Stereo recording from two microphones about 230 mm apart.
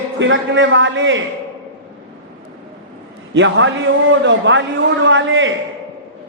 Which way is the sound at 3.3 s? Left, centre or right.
Right.